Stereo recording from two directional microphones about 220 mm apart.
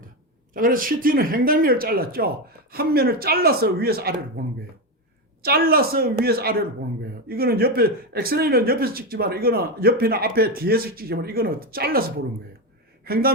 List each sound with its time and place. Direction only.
0.5 s speech: 40° right (ahead or behind)
5.4 s speech: 45° right (ahead or behind)